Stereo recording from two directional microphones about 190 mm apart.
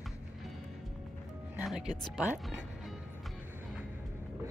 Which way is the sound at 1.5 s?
5° right (ahead or behind).